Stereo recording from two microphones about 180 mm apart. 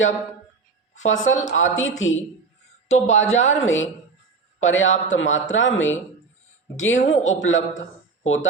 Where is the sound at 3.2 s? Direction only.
90° left.